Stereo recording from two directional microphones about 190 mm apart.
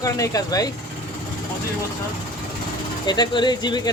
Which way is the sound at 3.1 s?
25° left (ahead or behind).